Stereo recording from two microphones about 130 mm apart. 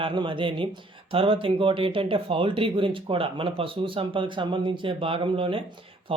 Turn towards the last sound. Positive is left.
turn(degrees=-45)  # may be behind; listen again after turning